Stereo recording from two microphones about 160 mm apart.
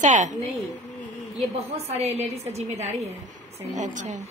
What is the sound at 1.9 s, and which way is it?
A woman's voice, 40° right (ahead or behind).